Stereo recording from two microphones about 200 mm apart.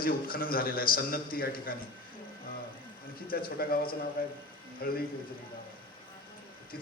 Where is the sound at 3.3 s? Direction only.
45° left (ahead or behind).